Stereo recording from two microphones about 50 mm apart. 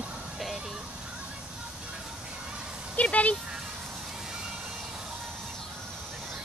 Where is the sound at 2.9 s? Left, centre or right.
Left.